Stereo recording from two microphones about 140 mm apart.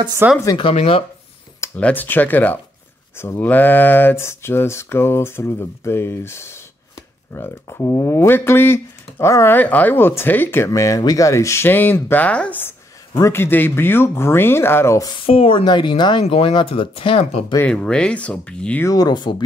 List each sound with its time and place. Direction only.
0.2 s speech: 15° right (ahead or behind)
0.6 s speech: 40° left (ahead or behind)
1.8 s speech: 10° left (ahead or behind)
15.0 s speech: 40° left (ahead or behind)
17.6 s speech: 10° left (ahead or behind)
18.9 s speech: 30° left (ahead or behind)